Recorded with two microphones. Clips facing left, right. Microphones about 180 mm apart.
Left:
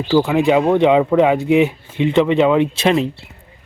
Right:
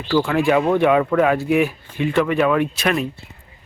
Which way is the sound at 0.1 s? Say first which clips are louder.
Left 3 dB; 20° left (ahead or behind).